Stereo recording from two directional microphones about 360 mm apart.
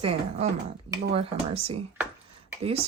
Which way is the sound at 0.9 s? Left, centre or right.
Centre.